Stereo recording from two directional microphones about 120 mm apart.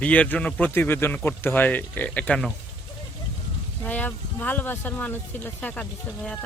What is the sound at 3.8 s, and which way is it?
Speech, 15° left (ahead or behind).